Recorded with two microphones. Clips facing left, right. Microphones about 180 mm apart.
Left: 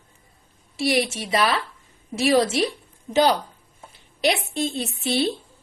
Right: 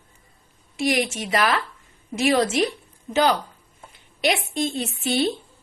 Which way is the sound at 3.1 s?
35° left (ahead or behind).